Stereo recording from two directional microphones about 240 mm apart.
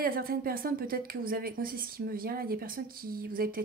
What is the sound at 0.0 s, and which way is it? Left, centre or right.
A woman's voice, right.